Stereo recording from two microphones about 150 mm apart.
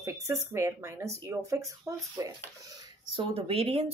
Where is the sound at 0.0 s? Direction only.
20° right (ahead or behind).